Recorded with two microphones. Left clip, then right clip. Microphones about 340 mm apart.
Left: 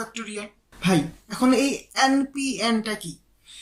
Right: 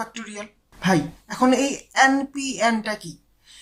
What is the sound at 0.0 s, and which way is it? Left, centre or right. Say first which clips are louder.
Speech: right 1 dB; centre.